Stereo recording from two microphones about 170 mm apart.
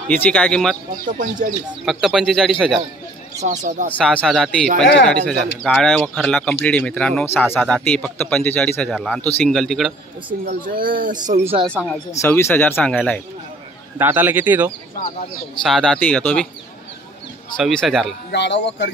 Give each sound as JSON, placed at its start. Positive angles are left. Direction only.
{"t": 0.1, "sound": "a man's voice", "side_deg": 5}
{"t": 1.0, "sound": "speech", "side_deg": -50}
{"t": 1.9, "sound": "speech", "side_deg": 0}
{"t": 3.4, "sound": "speech", "side_deg": -50}
{"t": 4.0, "sound": "a man's voice", "side_deg": 5}
{"t": 10.4, "sound": "speech", "side_deg": -60}
{"t": 11.6, "sound": "speech", "side_deg": 5}
{"t": 12.2, "sound": "a man's voice", "side_deg": 15}
{"t": 13.9, "sound": "a man's voice", "side_deg": -10}
{"t": 15.6, "sound": "speech", "side_deg": 5}
{"t": 17.6, "sound": "speech", "side_deg": 0}
{"t": 18.3, "sound": "speech", "side_deg": 90}